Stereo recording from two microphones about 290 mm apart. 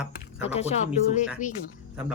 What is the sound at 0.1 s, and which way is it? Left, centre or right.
Speech, left.